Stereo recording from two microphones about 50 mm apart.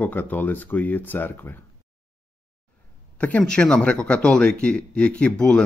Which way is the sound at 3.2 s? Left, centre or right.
Left.